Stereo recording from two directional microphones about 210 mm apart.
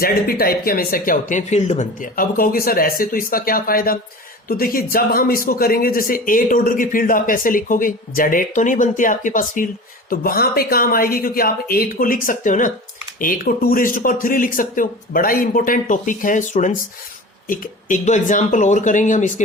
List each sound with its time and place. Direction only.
0.0 s speech: 45° left (ahead or behind)